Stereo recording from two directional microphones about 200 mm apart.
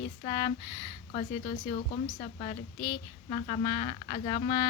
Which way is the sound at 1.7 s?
35° left (ahead or behind).